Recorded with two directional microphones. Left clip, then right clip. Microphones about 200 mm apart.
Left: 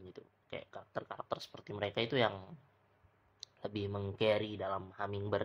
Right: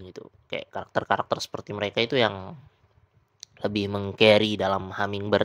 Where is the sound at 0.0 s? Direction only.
40° right (ahead or behind).